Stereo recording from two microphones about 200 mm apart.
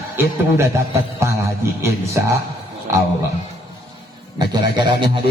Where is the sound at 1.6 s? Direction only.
15° right (ahead or behind).